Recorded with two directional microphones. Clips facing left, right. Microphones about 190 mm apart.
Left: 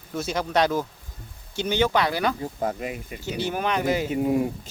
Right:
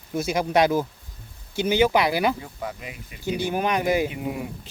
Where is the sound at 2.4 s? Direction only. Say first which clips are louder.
Left 6 dB; 45° left (ahead or behind).